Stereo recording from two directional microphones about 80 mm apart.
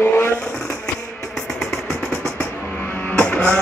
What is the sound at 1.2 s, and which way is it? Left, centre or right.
Music, centre.